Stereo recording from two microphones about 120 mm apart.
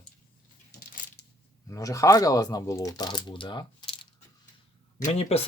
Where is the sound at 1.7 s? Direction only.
30° left (ahead or behind).